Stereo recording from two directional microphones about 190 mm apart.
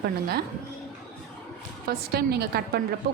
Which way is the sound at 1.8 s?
55° right (ahead or behind).